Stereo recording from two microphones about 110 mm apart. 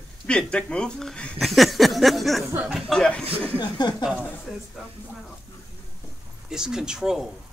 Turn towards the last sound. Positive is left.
turn(degrees=-5)  # may be behind; listen again after turning